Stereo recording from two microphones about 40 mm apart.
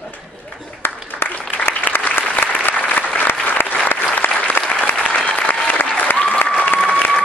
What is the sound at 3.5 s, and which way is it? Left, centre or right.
Applause, left.